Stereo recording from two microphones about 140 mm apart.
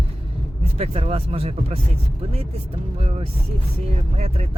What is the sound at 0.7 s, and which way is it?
Speech, 45° right (ahead or behind).